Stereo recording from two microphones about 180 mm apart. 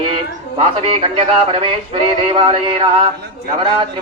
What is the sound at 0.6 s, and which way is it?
A man's voice, 30° right (ahead or behind).